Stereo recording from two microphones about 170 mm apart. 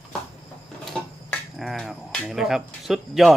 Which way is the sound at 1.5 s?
Centre (ahead or behind).